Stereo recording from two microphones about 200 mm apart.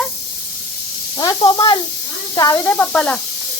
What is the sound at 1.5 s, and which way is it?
Speech, 25° left (ahead or behind).